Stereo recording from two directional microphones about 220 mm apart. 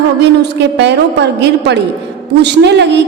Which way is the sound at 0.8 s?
50° right (ahead or behind).